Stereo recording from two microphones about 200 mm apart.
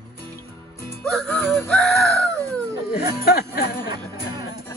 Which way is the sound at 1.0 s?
Centre (ahead or behind).